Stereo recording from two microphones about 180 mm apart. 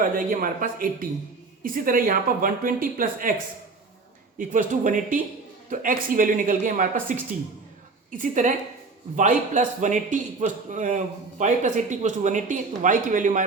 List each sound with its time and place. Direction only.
0.0 s a man's voice: 50° right (ahead or behind)
4.4 s a man's voice: 45° right (ahead or behind)